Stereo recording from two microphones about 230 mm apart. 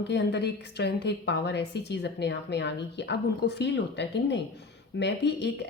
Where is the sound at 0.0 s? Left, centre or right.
Left.